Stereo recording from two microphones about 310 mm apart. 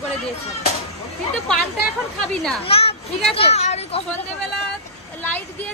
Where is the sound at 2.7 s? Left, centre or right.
Centre.